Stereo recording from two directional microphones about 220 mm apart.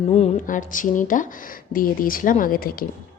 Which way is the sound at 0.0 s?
30° left (ahead or behind).